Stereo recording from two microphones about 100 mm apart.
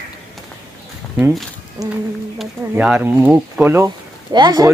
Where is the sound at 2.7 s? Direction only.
15° right (ahead or behind).